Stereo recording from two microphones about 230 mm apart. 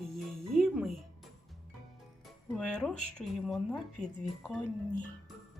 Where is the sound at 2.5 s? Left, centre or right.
Centre.